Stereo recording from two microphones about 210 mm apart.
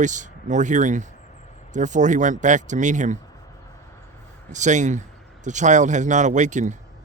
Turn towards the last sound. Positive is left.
turn(degrees=-35)  # may be behind; listen again after turning